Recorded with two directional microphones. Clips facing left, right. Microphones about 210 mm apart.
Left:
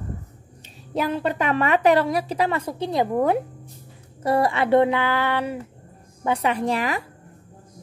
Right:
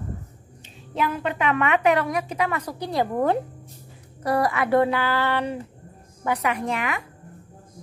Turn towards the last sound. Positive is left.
turn(degrees=35)  # may be behind; listen again after turning